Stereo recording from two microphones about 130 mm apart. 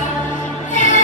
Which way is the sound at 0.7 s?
70° left (ahead or behind).